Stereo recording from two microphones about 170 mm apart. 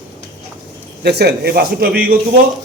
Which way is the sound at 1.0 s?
70° right (ahead or behind).